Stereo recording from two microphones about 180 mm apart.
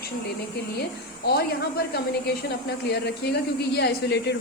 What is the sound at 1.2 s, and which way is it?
A woman's voice, 65° left (ahead or behind).